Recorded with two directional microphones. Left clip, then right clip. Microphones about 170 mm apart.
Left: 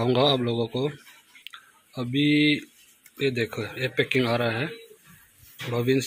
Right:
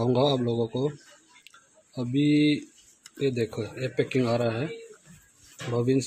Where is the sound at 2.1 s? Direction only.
5° right (ahead or behind).